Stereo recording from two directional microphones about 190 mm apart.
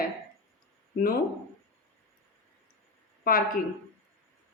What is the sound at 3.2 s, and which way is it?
Speech, 50° left (ahead or behind).